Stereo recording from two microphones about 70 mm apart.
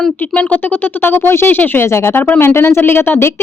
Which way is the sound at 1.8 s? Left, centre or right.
Left.